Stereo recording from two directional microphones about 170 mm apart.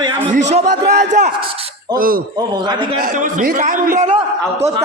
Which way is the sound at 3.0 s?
50° right (ahead or behind).